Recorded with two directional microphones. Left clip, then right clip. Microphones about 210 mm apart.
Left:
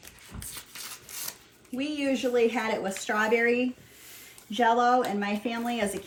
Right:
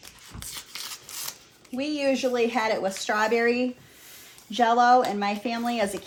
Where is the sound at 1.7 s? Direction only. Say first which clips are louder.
Right 4 dB; 30° right (ahead or behind).